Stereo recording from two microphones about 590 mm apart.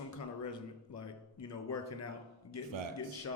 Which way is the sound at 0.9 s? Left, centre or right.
Left.